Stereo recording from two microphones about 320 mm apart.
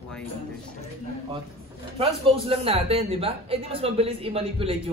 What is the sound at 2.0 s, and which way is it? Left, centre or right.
Speech, centre.